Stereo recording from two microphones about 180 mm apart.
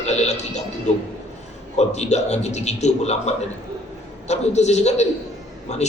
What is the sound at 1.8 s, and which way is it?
A man's voice, 40° left (ahead or behind).